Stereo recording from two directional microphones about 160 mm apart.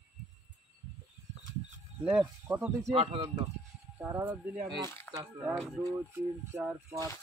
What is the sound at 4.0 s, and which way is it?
Speech, 15° right (ahead or behind).